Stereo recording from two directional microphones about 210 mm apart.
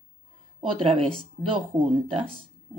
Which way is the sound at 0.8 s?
25° right (ahead or behind).